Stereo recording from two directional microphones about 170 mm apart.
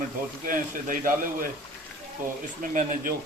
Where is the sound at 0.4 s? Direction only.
50° right (ahead or behind).